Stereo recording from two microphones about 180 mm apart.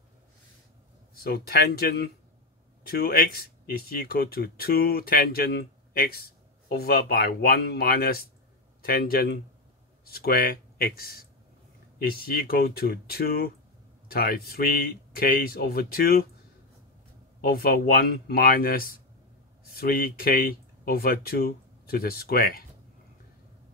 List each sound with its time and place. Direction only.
1.1 s speech: 60° left (ahead or behind)
17.4 s speech: 55° left (ahead or behind)